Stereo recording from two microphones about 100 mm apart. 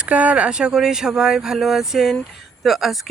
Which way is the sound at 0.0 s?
15° right (ahead or behind).